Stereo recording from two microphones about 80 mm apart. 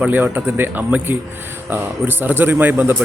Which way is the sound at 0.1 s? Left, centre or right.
Right.